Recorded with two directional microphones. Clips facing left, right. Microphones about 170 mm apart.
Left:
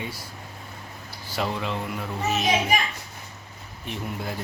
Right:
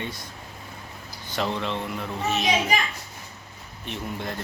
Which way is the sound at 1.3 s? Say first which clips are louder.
Right 1 dB; 5° left (ahead or behind).